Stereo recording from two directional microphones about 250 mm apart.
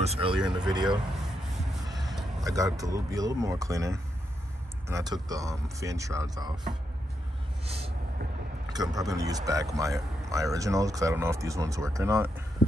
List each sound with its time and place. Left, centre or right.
0.0 s speech: right
1.9 s a sound: centre
2.4 s speech: centre
7.6 s vehicle: right
8.6 s speech: centre